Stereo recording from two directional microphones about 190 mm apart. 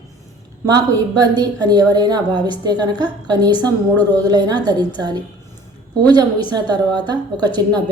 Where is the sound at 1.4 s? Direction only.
20° right (ahead or behind).